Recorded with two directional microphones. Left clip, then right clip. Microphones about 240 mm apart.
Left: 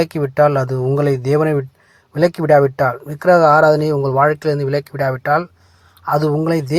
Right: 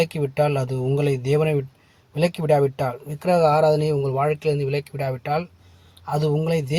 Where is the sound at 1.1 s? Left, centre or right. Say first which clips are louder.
Left 5 dB; centre.